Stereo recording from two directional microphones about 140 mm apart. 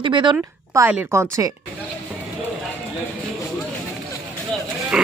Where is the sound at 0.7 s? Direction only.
20° right (ahead or behind).